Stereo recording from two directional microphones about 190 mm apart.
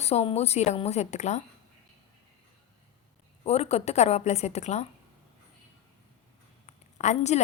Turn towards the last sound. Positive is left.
turn(degrees=35)  # may be behind; listen again after turning